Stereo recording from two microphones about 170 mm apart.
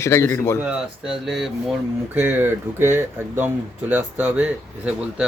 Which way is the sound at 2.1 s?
10° right (ahead or behind).